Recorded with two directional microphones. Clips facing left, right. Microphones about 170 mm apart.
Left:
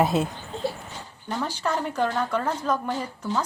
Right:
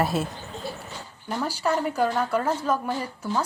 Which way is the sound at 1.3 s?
10° right (ahead or behind).